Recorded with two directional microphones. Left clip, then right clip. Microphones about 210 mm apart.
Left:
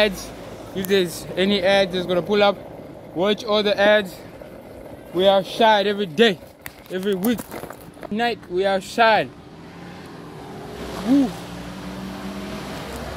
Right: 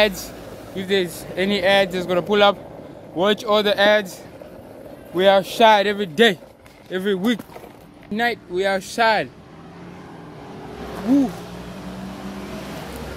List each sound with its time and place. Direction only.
0.0 s speech: centre (ahead or behind)
5.1 s speech: 5° right (ahead or behind)
8.1 s speech: 5° left (ahead or behind)